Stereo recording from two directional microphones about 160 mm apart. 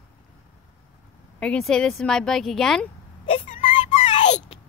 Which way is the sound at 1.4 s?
5° left (ahead or behind).